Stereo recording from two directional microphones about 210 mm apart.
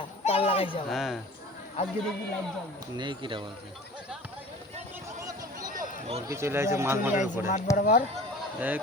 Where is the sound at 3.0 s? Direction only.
20° right (ahead or behind).